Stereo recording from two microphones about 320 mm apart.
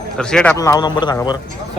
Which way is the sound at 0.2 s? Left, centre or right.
Centre.